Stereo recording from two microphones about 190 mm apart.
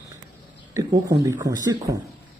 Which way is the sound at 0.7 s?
20° right (ahead or behind).